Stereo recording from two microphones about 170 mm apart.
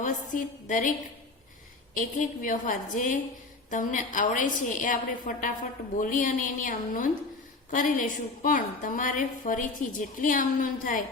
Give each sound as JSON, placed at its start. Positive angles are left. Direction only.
{"t": 0.0, "sound": "a woman's voice", "side_deg": 50}
{"t": 2.0, "sound": "a woman's voice", "side_deg": 50}